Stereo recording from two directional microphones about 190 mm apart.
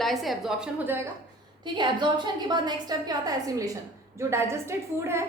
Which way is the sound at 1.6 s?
25° right (ahead or behind).